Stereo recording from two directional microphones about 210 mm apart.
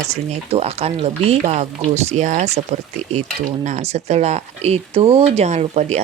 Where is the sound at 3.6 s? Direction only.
30° right (ahead or behind).